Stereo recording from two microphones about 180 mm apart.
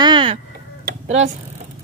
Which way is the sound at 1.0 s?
35° right (ahead or behind).